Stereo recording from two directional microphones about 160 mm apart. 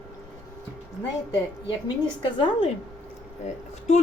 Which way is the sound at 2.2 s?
30° left (ahead or behind).